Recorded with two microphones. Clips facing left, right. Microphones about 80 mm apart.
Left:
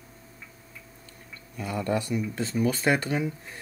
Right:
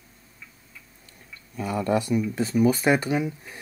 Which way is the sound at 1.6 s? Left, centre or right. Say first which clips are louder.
Right 4 dB; centre.